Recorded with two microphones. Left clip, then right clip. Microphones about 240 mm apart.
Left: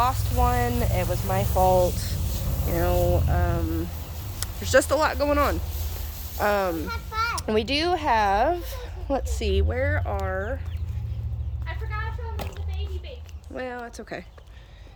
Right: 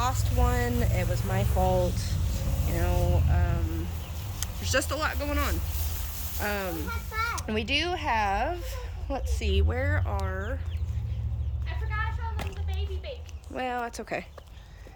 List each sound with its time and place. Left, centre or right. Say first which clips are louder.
0.0 s speech: left 6 dB; centre
1.6 s speech: left 7 dB; left
2.1 s vehicle: left 2 dB; left
2.6 s a woman's voice: left 8 dB; left
4.4 s a woman's voice: left 8 dB; centre
6.8 s children playing: left 4 dB; left
7.3 s a woman's voice: left 4 dB; left
9.6 s speech: left 3 dB; centre
13.5 s speech: right 2 dB; centre